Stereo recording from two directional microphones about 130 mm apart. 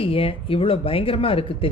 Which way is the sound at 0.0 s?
45° left (ahead or behind).